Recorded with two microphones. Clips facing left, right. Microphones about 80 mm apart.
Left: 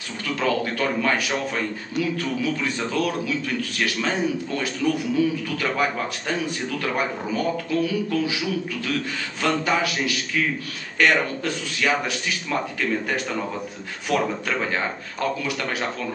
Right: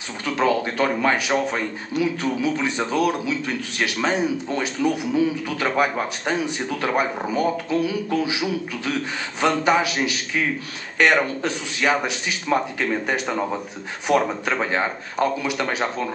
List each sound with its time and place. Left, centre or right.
0.4 s a man's voice: centre